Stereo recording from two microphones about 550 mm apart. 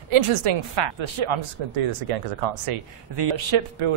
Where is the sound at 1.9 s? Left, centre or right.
Right.